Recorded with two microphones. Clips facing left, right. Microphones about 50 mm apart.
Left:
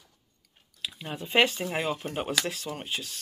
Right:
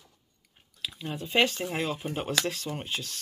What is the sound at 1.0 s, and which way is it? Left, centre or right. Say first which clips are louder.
Speech: left 1 dB; centre.